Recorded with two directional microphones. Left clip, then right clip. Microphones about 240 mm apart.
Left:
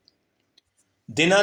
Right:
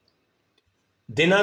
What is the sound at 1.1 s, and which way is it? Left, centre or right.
Speech, left.